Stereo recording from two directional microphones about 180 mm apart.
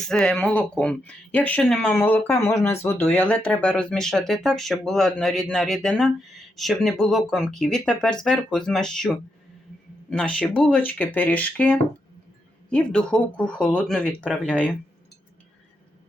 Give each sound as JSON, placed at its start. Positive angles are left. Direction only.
{"t": 0.0, "sound": "speech", "side_deg": 5}